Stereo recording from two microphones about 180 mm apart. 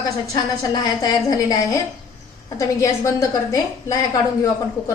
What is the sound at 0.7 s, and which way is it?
A woman's voice, 20° left (ahead or behind).